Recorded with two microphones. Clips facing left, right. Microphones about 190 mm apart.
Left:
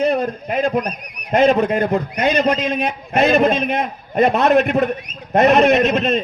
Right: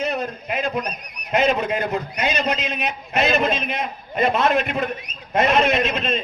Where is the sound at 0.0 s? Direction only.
55° left (ahead or behind).